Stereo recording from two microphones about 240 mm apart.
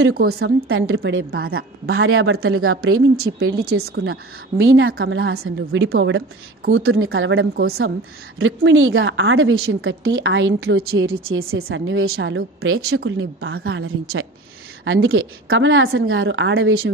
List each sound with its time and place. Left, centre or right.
0.1 s a woman's voice: right
0.7 s a woman's voice: right